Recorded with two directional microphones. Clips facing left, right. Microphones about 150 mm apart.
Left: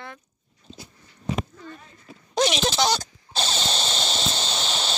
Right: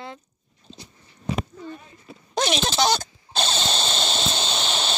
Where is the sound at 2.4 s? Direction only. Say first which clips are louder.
Left 1 dB; 55° right (ahead or behind).